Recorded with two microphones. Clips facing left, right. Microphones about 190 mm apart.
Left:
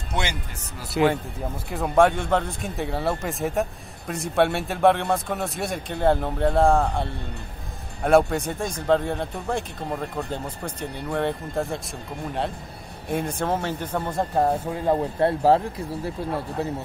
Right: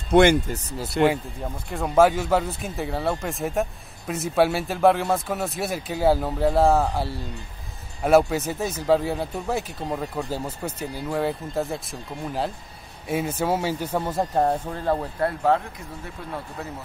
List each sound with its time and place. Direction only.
0.1 s speech: 55° right (ahead or behind)
0.9 s speech: 5° right (ahead or behind)
15.1 s speech: 30° left (ahead or behind)